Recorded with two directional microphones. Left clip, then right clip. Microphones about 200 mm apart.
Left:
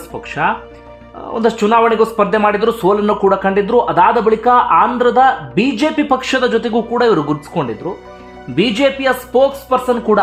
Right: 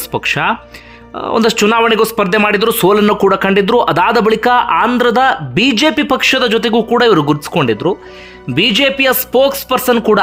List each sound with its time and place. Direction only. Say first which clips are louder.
0.1 s speech: right 3 dB; 20° right (ahead or behind)